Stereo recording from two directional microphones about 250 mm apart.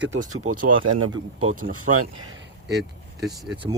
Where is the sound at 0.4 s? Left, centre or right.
Right.